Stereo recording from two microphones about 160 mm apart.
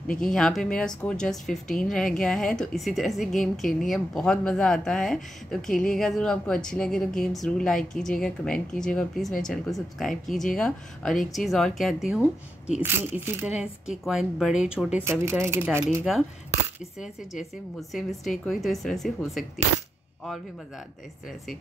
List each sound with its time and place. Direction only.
0.2 s speech: 5° left (ahead or behind)
12.8 s speech: 15° right (ahead or behind)
13.5 s speech: 5° right (ahead or behind)
17.0 s speech: centre (ahead or behind)